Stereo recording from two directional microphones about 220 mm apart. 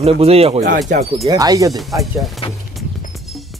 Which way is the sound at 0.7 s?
35° right (ahead or behind).